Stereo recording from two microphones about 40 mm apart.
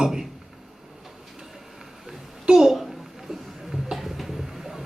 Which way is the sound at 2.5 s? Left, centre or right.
Centre.